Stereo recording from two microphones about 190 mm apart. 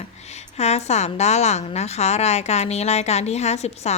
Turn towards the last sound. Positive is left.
turn(degrees=35)  # may be behind; listen again after turning